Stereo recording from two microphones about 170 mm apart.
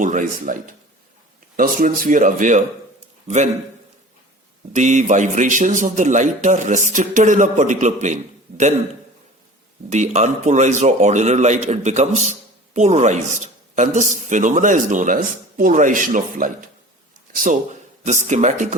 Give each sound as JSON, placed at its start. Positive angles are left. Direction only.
{"t": 0.0, "sound": "a man's voice", "side_deg": -50}
{"t": 4.7, "sound": "a man's voice", "side_deg": -45}
{"t": 9.9, "sound": "a man's voice", "side_deg": -45}